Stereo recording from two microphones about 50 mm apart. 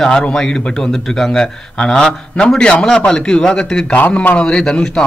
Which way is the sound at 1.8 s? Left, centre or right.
Centre.